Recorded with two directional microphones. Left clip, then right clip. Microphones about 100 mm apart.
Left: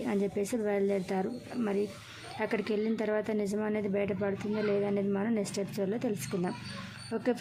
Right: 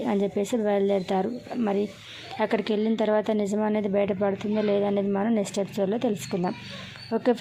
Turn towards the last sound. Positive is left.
turn(degrees=-40)  # may be behind; listen again after turning